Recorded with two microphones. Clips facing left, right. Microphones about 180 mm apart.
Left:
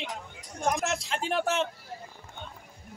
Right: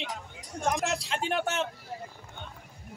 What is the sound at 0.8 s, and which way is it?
Speech, 35° right (ahead or behind).